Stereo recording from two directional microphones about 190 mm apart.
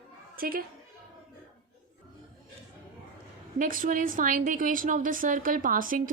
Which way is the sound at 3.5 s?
45° right (ahead or behind).